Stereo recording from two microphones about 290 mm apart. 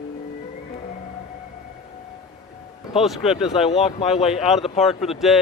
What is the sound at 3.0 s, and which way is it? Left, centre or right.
Speech, centre.